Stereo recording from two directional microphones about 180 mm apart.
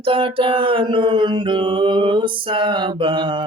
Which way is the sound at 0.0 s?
30° right (ahead or behind).